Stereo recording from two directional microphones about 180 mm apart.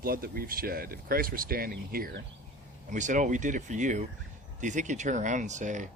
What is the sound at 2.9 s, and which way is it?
Speech, 45° right (ahead or behind).